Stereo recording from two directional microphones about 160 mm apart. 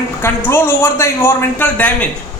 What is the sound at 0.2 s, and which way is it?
A man's voice, 15° left (ahead or behind).